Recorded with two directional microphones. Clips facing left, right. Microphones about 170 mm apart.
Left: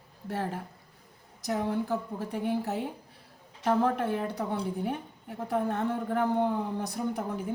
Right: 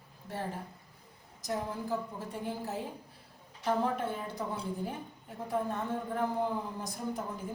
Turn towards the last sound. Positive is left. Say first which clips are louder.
# left 5 dB
turn(degrees=65)  # may be behind; listen again after turning